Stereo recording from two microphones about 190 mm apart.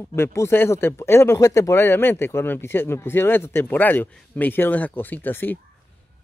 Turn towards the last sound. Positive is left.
turn(degrees=10)  # may be behind; listen again after turning